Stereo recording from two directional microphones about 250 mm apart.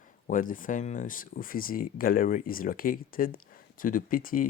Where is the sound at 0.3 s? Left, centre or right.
Left.